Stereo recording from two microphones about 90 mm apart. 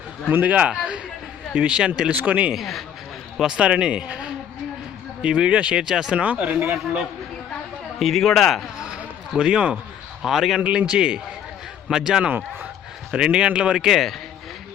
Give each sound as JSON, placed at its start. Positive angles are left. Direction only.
{"t": 0.3, "sound": "speech", "side_deg": -20}
{"t": 2.6, "sound": "a man's voice", "side_deg": 0}
{"t": 7.9, "sound": "a man's voice", "side_deg": 0}
{"t": 8.8, "sound": "a sound", "side_deg": -10}
{"t": 10.2, "sound": "a man's voice", "side_deg": -5}